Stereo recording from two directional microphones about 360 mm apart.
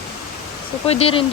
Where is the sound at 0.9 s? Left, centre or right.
Centre.